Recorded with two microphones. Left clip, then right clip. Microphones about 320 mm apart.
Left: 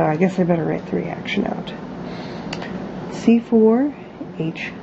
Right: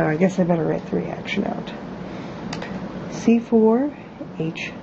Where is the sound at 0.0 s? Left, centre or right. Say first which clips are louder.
Left 2 dB; centre.